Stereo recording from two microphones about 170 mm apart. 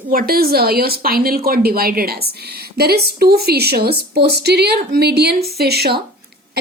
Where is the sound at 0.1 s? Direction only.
60° right (ahead or behind).